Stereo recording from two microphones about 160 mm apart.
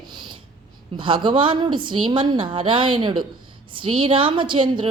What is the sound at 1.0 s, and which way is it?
A woman's voice, 30° right (ahead or behind).